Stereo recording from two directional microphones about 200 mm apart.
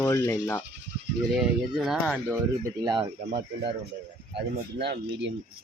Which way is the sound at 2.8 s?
20° right (ahead or behind).